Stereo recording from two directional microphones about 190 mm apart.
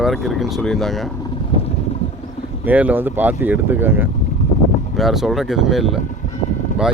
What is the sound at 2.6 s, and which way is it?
Speech, 10° right (ahead or behind).